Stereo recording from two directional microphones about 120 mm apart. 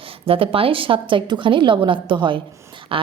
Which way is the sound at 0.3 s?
50° right (ahead or behind).